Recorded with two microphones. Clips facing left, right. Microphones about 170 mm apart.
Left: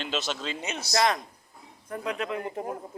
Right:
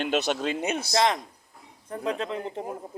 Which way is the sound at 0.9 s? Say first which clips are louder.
Even; 25° right (ahead or behind).